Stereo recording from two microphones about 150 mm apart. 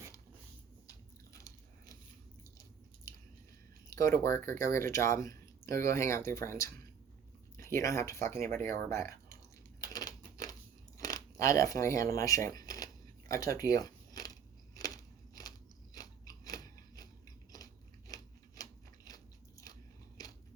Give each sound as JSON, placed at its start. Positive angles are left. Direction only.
{"t": 0.9, "sound": "biting", "side_deg": 20}
{"t": 3.8, "sound": "a sound", "side_deg": 20}
{"t": 4.2, "sound": "speech", "side_deg": 20}
{"t": 9.8, "sound": "a sound", "side_deg": 25}
{"t": 10.9, "sound": "speech", "side_deg": 20}
{"t": 16.0, "sound": "biting", "side_deg": 25}
{"t": 18.1, "sound": "biting", "side_deg": 25}